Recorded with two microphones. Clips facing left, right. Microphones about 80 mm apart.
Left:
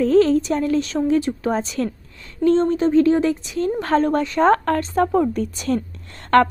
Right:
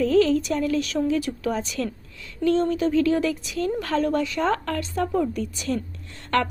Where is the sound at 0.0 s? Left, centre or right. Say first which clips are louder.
Left 4 dB; left.